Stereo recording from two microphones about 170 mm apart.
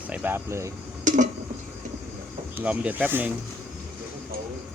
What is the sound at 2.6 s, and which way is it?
Speech, 10° right (ahead or behind).